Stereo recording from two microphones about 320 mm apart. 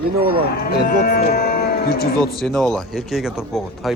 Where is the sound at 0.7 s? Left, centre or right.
Left.